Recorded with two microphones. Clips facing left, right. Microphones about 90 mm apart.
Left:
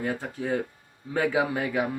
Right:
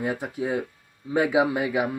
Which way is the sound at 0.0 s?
15° right (ahead or behind).